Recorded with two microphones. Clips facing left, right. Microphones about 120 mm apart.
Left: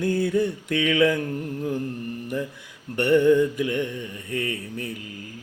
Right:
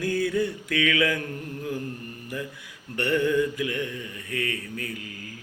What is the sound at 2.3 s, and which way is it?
Music, 25° left (ahead or behind).